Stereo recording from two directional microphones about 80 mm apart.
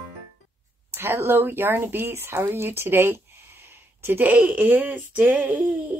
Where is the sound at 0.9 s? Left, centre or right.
Right.